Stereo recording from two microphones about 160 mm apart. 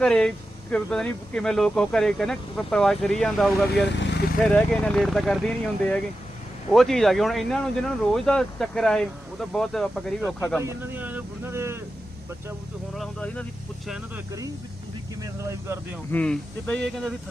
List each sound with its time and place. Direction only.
0.0 s speech: 5° left (ahead or behind)
3.9 s vehicle: 90° left
4.4 s speech: 5° left (ahead or behind)
10.6 s speech: 15° right (ahead or behind)
13.0 s speech: 5° left (ahead or behind)
15.2 s speech: 20° right (ahead or behind)
16.1 s speech: 5° left (ahead or behind)